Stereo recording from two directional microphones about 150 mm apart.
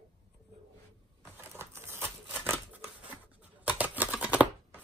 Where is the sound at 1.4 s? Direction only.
15° right (ahead or behind).